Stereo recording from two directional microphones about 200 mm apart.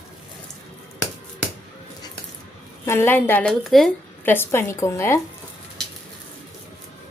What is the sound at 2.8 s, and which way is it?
A woman's voice, 10° left (ahead or behind).